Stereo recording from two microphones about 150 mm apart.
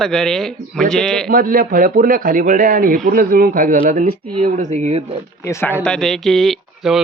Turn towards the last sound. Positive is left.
turn(degrees=0)  # may be behind; listen again after turning